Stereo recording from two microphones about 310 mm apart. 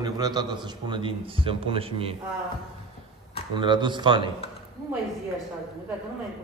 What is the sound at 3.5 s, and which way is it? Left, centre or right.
Speech, centre.